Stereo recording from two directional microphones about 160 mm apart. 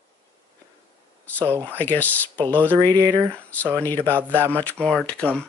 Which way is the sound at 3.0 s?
20° right (ahead or behind).